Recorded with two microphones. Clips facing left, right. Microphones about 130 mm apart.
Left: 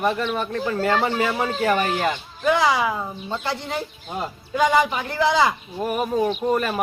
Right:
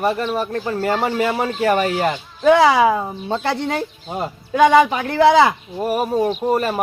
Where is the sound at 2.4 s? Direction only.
75° right (ahead or behind).